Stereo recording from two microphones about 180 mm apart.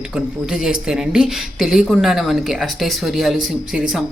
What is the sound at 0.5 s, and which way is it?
Speech, 5° right (ahead or behind).